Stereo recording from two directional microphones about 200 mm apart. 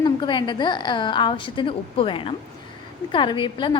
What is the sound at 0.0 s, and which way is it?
A woman's voice, 25° left (ahead or behind).